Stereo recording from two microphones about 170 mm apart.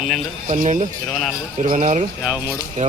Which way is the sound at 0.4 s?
50° right (ahead or behind).